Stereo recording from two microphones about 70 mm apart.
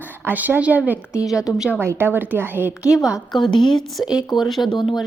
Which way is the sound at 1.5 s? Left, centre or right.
Left.